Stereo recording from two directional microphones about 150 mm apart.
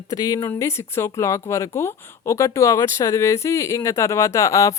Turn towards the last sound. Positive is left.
turn(degrees=20)  # may be behind; listen again after turning